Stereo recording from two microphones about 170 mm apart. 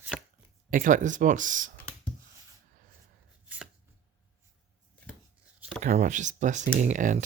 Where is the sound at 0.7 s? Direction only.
50° right (ahead or behind).